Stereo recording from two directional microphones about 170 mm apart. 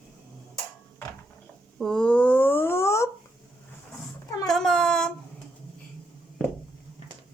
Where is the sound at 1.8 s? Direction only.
5° left (ahead or behind).